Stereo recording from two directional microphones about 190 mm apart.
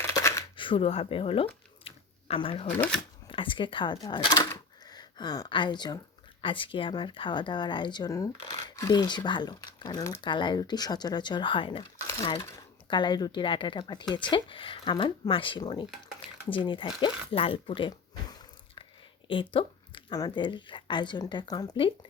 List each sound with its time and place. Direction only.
0.1 s coin: 15° left (ahead or behind)
0.5 s speech: 25° left (ahead or behind)
1.8 s a sound: 30° left (ahead or behind)
2.7 s speech: 10° left (ahead or behind)
3.2 s speech: 25° left (ahead or behind)
11.9 s a sound: 15° left (ahead or behind)
12.4 s speech: 20° left (ahead or behind)